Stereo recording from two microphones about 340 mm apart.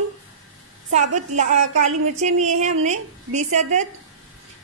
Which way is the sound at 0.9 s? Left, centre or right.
Right.